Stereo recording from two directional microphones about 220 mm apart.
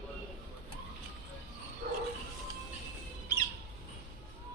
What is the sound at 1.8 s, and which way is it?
Bow-wow, 40° right (ahead or behind).